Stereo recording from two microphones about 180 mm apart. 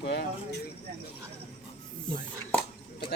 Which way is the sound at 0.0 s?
65° left (ahead or behind).